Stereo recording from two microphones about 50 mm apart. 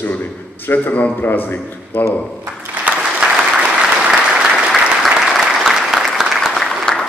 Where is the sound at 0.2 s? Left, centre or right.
Left.